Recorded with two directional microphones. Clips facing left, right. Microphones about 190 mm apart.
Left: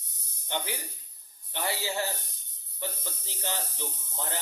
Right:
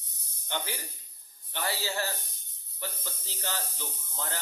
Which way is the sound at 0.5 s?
20° left (ahead or behind).